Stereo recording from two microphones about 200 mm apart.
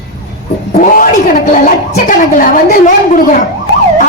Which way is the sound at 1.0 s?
40° left (ahead or behind).